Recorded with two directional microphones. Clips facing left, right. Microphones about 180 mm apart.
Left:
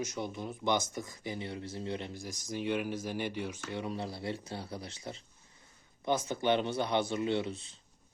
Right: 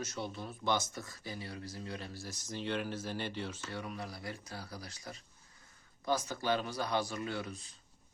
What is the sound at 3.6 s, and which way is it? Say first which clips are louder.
Speech: left 5 dB; 25° left (ahead or behind).